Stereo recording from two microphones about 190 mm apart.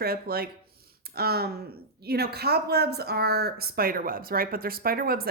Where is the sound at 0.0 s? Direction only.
55° right (ahead or behind).